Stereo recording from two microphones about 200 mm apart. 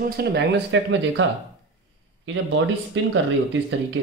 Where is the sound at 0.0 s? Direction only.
50° right (ahead or behind).